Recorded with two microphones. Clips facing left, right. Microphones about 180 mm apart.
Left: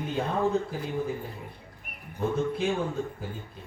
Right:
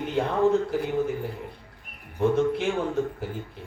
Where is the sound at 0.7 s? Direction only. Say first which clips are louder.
Right 5 dB; 70° right (ahead or behind).